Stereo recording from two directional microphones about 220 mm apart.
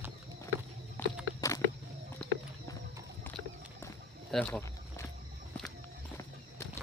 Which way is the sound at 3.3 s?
10° left (ahead or behind).